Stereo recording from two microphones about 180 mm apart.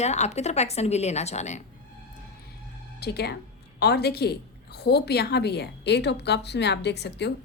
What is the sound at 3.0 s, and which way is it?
A woman's voice, 65° left (ahead or behind).